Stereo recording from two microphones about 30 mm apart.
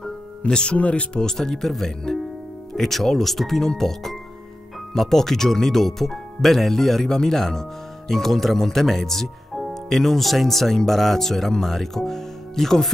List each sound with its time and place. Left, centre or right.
0.5 s speech: left
0.7 s speech: left
1.1 s speech: centre